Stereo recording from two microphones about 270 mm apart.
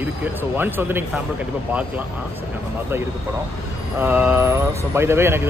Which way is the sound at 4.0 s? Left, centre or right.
Centre.